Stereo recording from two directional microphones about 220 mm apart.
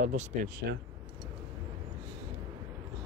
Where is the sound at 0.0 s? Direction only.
35° right (ahead or behind).